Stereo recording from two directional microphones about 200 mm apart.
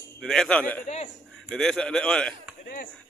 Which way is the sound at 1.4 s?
5° left (ahead or behind).